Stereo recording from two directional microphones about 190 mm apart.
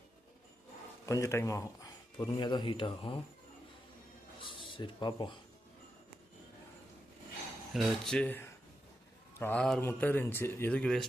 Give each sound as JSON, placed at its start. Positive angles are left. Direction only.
{"t": 1.0, "sound": "speech", "side_deg": 15}
{"t": 4.7, "sound": "speech", "side_deg": 25}
{"t": 7.7, "sound": "speech", "side_deg": 0}